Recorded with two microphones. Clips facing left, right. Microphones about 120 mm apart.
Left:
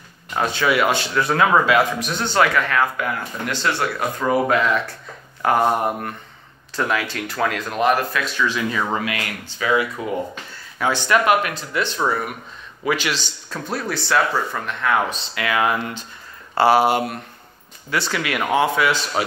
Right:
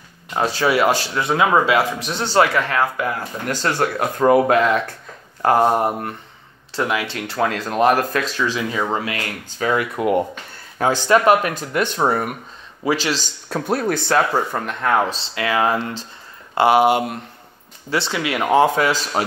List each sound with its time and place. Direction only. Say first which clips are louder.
0.4 s speech: right 2 dB; 35° right (ahead or behind)
1.1 s a man's voice: even; 20° right (ahead or behind)
3.4 s speech: right 2 dB; 40° right (ahead or behind)
5.4 s a man's voice: right 2 dB; 30° right (ahead or behind)
7.8 s speech: right 2 dB; 40° right (ahead or behind)
8.5 s a man's voice: right 1 dB; 25° right (ahead or behind)
9.7 s speech: right 2 dB; 55° right (ahead or behind)
10.8 s speech: right 3 dB; 40° right (ahead or behind)
11.5 s speech: right 3 dB; 50° right (ahead or behind)
12.8 s speech: right 2 dB; 35° right (ahead or behind)
13.5 s speech: right 6 dB; 60° right (ahead or behind); by 16.1 s 30° right (ahead or behind)
16.5 s a man's voice: right 1 dB; 20° right (ahead or behind)
18.5 s speech: right 3 dB; 40° right (ahead or behind)